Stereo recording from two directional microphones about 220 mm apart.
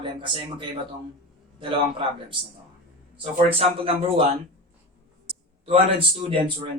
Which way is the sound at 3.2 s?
25° right (ahead or behind).